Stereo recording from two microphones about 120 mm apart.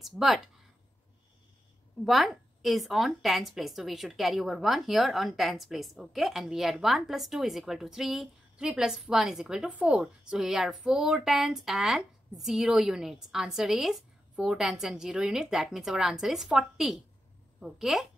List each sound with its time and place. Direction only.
0.0 s a woman's voice: centre (ahead or behind)
2.0 s a woman's voice: centre (ahead or behind)